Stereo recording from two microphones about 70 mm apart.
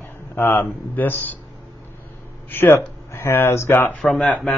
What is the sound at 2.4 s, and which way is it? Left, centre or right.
Speech, left.